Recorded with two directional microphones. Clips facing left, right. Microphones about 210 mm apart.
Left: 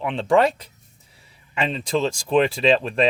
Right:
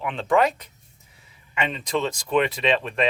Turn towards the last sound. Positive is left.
turn(degrees=35)  # may be behind; listen again after turning